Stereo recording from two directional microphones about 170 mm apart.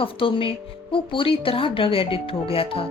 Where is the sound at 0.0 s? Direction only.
30° left (ahead or behind).